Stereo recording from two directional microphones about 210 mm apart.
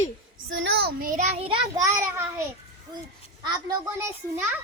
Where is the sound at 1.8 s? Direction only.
15° right (ahead or behind).